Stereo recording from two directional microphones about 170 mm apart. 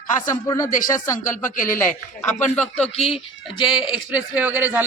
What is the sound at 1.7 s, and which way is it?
Speech, 10° left (ahead or behind).